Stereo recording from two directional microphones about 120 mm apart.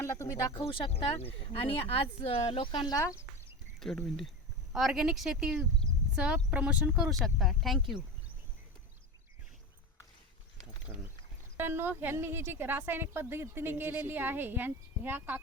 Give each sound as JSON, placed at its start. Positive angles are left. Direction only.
{"t": 0.0, "sound": "speech", "side_deg": 25}
{"t": 0.6, "sound": "speech", "side_deg": 50}
{"t": 2.9, "sound": "speech", "side_deg": 25}
{"t": 3.8, "sound": "speech", "side_deg": 5}
{"t": 11.5, "sound": "speech", "side_deg": -20}